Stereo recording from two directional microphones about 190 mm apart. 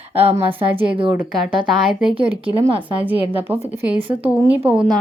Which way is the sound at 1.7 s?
5° right (ahead or behind).